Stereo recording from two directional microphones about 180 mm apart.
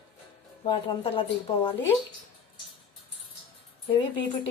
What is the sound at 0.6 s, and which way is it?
Speech, 30° left (ahead or behind).